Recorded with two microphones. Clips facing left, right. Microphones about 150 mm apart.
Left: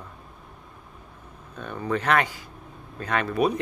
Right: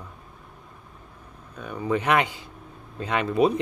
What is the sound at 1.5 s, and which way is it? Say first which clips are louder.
Speech: right 2 dB; 5° right (ahead or behind).